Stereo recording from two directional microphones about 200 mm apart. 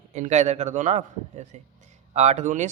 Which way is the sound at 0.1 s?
35° right (ahead or behind).